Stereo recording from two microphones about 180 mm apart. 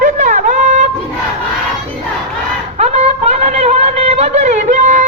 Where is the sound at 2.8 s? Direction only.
35° right (ahead or behind).